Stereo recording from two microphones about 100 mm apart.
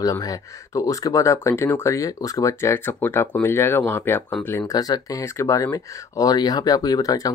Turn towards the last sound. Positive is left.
turn(degrees=35)  # may be behind; listen again after turning